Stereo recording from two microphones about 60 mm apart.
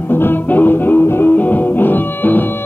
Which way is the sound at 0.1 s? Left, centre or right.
Left.